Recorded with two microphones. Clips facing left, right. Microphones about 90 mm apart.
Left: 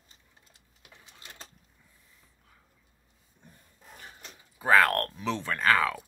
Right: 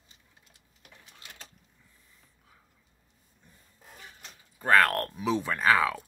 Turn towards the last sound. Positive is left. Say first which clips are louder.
# right 1 dB
turn(degrees=-5)  # may be behind; listen again after turning